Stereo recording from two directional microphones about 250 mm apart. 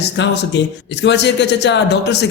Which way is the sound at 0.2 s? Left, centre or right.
Left.